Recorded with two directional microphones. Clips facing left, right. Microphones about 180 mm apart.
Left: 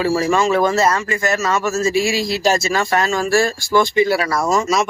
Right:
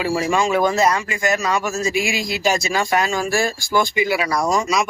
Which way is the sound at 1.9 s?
35° left (ahead or behind).